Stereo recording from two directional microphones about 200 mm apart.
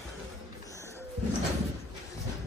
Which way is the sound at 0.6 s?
15° left (ahead or behind).